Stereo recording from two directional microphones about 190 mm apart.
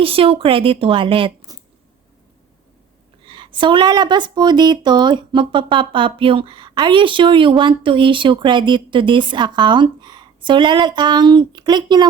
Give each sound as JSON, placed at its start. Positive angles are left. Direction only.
{"t": 0.0, "sound": "speech", "side_deg": -30}
{"t": 3.2, "sound": "speech", "side_deg": -25}